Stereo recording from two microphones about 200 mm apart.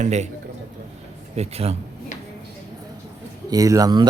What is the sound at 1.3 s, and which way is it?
Speech, 30° right (ahead or behind).